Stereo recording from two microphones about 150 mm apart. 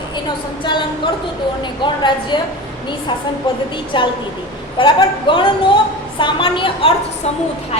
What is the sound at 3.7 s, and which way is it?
A woman's voice, 35° left (ahead or behind).